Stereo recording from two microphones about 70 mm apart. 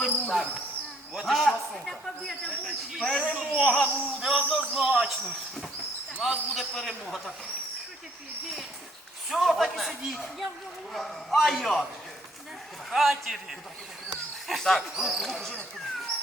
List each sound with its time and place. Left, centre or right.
0.0 s a sound: centre
1.1 s a man's voice: centre
3.3 s a man's voice: centre
3.6 s a man's voice: centre
6.1 s a man's voice: centre
6.5 s a man's voice: centre
9.3 s a man's voice: centre
12.9 s a man's voice: centre